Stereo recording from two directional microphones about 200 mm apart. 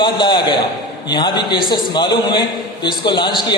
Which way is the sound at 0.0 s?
25° left (ahead or behind).